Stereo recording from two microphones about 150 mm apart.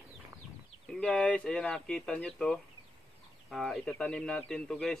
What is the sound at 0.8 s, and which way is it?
Speech, 5° left (ahead or behind).